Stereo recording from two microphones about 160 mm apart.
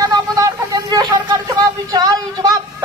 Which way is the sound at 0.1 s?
25° right (ahead or behind).